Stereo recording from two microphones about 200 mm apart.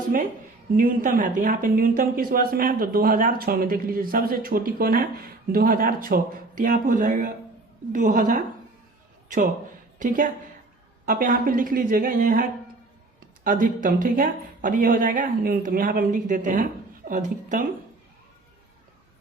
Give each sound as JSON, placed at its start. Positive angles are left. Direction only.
{"t": 0.8, "sound": "a woman's voice", "side_deg": -45}
{"t": 10.0, "sound": "a woman's voice", "side_deg": -40}